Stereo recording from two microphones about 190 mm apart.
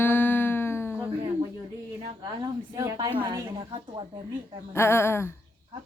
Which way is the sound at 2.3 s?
20° right (ahead or behind).